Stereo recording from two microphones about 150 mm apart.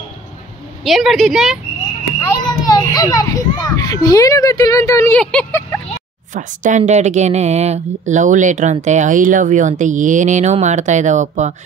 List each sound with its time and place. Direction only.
0.8 s a woman's voice: centre (ahead or behind)
2.6 s a child's voice: 25° left (ahead or behind)
5.1 s speech: 5° left (ahead or behind)
6.3 s speech: 55° right (ahead or behind)